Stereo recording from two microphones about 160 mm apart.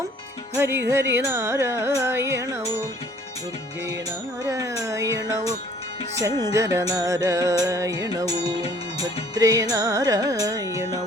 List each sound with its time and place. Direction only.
0.5 s carnatic music: 15° right (ahead or behind)
4.4 s music: 20° right (ahead or behind)